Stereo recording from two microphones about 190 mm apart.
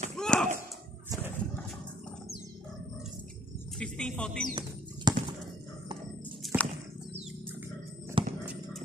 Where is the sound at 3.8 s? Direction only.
5° left (ahead or behind).